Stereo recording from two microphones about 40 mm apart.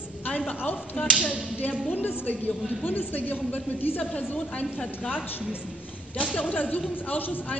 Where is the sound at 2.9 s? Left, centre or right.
Left.